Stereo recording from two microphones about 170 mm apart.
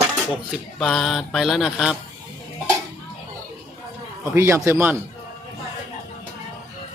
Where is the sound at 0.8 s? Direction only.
Centre (ahead or behind).